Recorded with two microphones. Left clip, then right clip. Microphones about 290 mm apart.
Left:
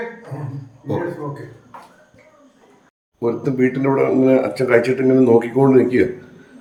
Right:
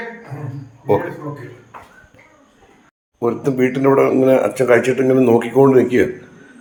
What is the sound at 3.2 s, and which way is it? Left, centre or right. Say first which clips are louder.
Speech: right 2 dB; centre.